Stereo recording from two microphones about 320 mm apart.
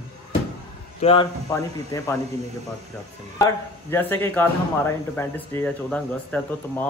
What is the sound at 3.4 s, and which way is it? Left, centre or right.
A man's voice, centre.